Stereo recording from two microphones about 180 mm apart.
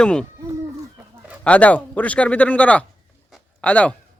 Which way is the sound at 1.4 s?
5° left (ahead or behind).